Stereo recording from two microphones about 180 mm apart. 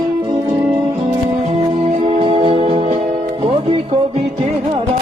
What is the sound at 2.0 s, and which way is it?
Music, 35° right (ahead or behind).